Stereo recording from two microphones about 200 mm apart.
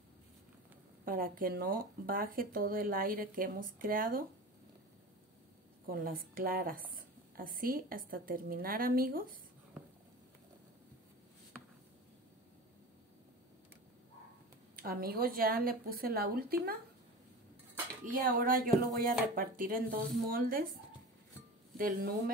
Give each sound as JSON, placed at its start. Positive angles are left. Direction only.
{"t": 1.0, "sound": "a woman's voice", "side_deg": -45}
{"t": 5.9, "sound": "a woman's voice", "side_deg": -45}
{"t": 14.8, "sound": "a woman's voice", "side_deg": -50}
{"t": 18.1, "sound": "a woman's voice", "side_deg": -45}
{"t": 21.7, "sound": "a woman's voice", "side_deg": -45}